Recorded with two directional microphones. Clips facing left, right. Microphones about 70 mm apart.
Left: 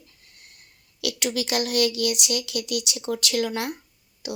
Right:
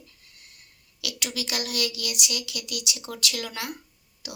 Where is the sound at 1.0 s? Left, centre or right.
Left.